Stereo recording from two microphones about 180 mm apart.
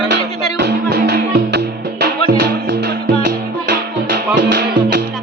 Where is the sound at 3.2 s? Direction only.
60° right (ahead or behind).